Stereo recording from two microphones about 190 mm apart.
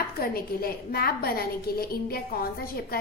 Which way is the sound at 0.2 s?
50° left (ahead or behind).